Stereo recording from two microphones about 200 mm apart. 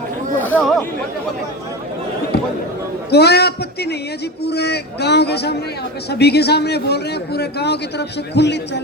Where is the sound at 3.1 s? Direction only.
55° left (ahead or behind).